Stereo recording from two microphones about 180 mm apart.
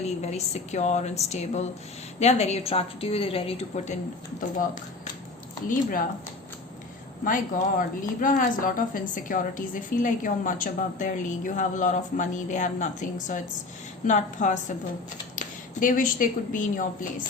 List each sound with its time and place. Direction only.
0.0 s a woman's voice: 35° left (ahead or behind)
7.3 s a woman's voice: 50° left (ahead or behind)